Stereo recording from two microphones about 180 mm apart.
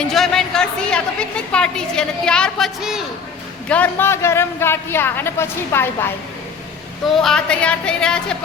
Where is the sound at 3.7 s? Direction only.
10° left (ahead or behind).